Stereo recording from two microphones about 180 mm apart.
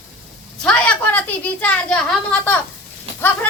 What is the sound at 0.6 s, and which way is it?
A child's voice, 5° left (ahead or behind).